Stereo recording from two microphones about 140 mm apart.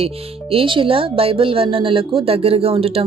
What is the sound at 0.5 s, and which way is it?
Speech, 40° right (ahead or behind).